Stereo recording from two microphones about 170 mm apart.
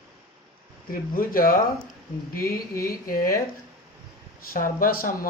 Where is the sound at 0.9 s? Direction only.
55° left (ahead or behind).